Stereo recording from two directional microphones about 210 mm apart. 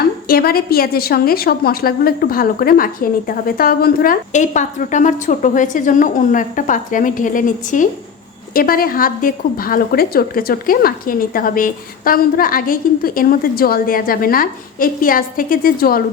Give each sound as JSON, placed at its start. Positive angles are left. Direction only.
{"t": 0.3, "sound": "a woman's voice", "side_deg": 45}